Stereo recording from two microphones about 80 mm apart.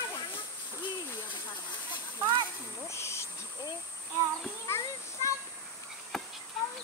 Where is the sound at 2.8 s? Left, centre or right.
Left.